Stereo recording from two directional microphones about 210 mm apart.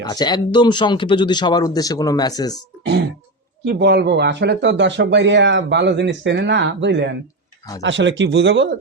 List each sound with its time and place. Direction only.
0.0 s speech: 20° left (ahead or behind)
3.6 s speech: 55° right (ahead or behind)